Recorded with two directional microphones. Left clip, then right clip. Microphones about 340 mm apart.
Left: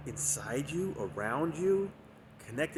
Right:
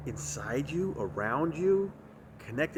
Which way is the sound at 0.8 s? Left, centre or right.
Centre.